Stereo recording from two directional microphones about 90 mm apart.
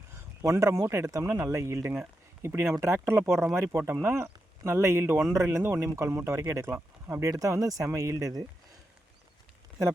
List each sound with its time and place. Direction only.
0.1 s speech: 35° right (ahead or behind)